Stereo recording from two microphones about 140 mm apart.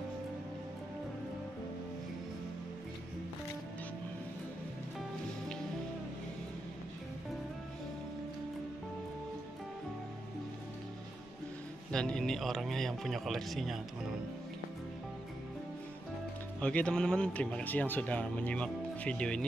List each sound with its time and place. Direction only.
11.9 s speech: 5° left (ahead or behind)
16.6 s speech: 10° left (ahead or behind)